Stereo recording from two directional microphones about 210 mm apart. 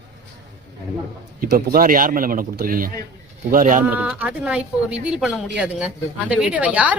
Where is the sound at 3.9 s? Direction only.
10° right (ahead or behind).